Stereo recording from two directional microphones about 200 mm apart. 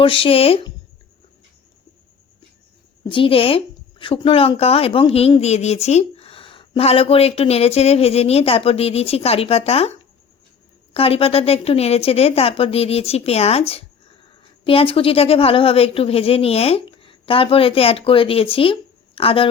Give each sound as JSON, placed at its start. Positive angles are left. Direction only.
{"t": 0.0, "sound": "a woman's voice", "side_deg": 25}
{"t": 3.0, "sound": "a woman's voice", "side_deg": 25}